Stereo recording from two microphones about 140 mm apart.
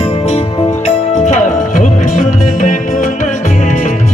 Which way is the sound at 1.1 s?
60° left (ahead or behind).